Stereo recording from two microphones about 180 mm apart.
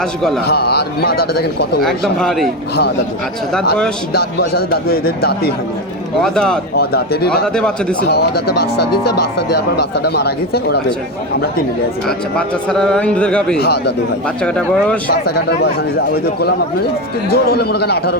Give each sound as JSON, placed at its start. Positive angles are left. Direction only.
{"t": 1.4, "sound": "a man's voice", "side_deg": 65}
{"t": 1.8, "sound": "speech", "side_deg": 0}
{"t": 3.5, "sound": "speech", "side_deg": 5}
{"t": 4.4, "sound": "a man's voice", "side_deg": 60}
{"t": 6.2, "sound": "speech", "side_deg": 5}
{"t": 6.7, "sound": "a man's voice", "side_deg": 60}
{"t": 7.4, "sound": "speech", "side_deg": 5}
{"t": 10.1, "sound": "a man's voice", "side_deg": 65}
{"t": 12.0, "sound": "speech", "side_deg": 5}
{"t": 15.4, "sound": "a man's voice", "side_deg": 65}